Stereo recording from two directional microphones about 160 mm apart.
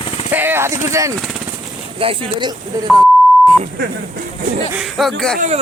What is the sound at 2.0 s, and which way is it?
Speech, 35° right (ahead or behind).